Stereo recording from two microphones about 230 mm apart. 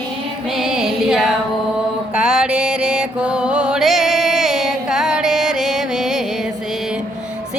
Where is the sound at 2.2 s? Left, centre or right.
Centre.